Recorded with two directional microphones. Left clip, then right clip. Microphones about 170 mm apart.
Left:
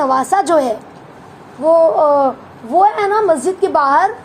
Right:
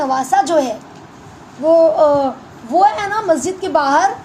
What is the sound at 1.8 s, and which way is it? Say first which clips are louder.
A woman's voice: even; 20° left (ahead or behind).